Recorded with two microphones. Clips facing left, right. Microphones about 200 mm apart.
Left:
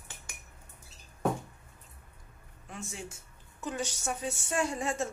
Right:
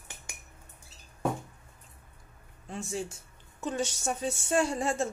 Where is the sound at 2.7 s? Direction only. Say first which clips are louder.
Right 7 dB; 30° right (ahead or behind).